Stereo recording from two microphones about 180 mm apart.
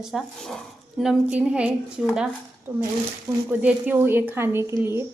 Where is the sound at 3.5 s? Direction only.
10° right (ahead or behind).